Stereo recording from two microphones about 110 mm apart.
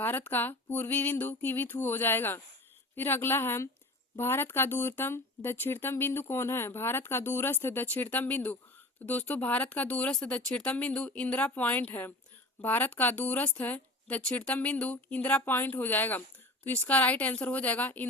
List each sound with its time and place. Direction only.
0.0 s speech: 20° left (ahead or behind)